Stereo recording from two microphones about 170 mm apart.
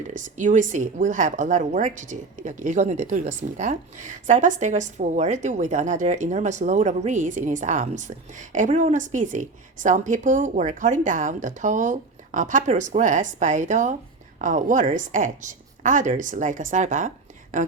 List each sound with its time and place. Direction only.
0.1 s a woman's voice: 45° right (ahead or behind)